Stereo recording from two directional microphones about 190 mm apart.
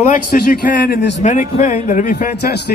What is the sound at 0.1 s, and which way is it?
A man's voice, 50° left (ahead or behind).